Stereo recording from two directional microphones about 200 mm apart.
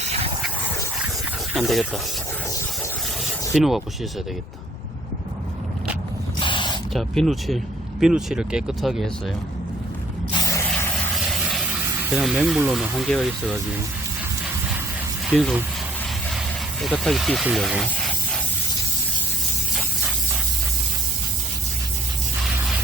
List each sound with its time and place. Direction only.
0.0 s hiss: 30° right (ahead or behind)
1.5 s speech: centre (ahead or behind)
3.2 s a sound: centre (ahead or behind)
6.4 s a sound: 25° left (ahead or behind)
6.9 s speech: centre (ahead or behind)
10.4 s spray: 15° left (ahead or behind)
11.3 s a sound: centre (ahead or behind)
12.1 s speech: centre (ahead or behind)
15.3 s speech: centre (ahead or behind)
16.8 s speech: centre (ahead or behind)